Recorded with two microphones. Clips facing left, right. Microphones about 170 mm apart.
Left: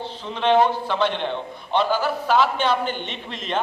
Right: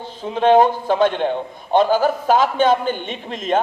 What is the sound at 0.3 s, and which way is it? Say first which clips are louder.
A man's voice: right 5 dB; 45° right (ahead or behind).